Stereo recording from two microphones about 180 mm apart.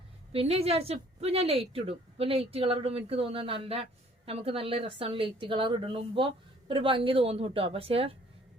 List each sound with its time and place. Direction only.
0.3 s a woman's voice: 35° right (ahead or behind)